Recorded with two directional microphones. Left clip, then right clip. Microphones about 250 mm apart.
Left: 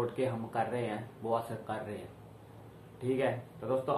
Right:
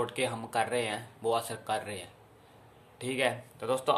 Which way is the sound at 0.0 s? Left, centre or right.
Right.